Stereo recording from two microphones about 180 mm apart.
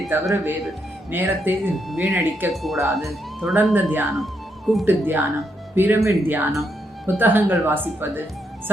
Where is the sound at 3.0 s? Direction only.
Centre (ahead or behind).